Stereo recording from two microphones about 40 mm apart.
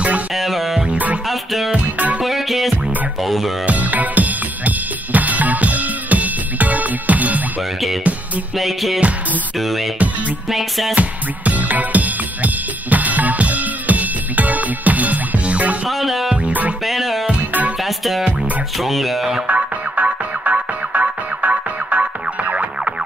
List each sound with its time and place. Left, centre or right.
0.3 s music: centre
0.9 s music: right
1.2 s music: centre
2.0 s music: right
2.2 s music: centre
3.6 s drum kit: right
8.5 s music: centre
11.0 s music: right
15.9 s music: centre
17.4 s music: right
17.7 s music: centre
18.8 s speech: centre
19.4 s music: right